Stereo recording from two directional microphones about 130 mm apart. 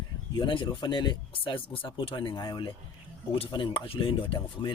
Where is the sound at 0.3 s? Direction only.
40° left (ahead or behind).